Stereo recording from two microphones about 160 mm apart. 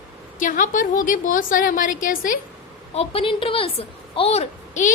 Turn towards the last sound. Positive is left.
turn(degrees=45)  # may be behind; listen again after turning